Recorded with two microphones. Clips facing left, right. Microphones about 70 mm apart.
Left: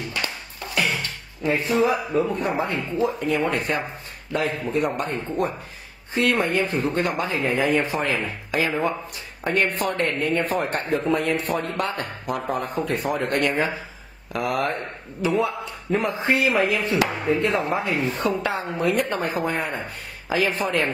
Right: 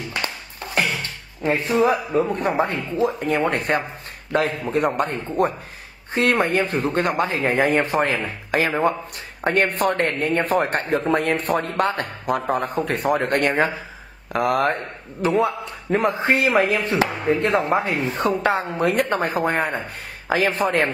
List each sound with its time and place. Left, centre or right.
1.4 s speech: right
18.4 s speech: right